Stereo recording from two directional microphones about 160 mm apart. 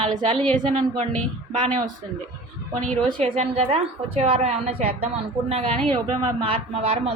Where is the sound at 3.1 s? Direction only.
40° right (ahead or behind).